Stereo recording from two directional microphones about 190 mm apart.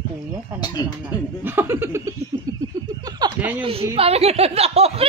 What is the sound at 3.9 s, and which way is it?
Speech, 30° right (ahead or behind).